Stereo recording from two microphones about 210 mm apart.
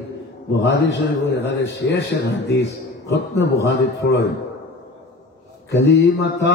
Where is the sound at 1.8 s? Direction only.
55° left (ahead or behind).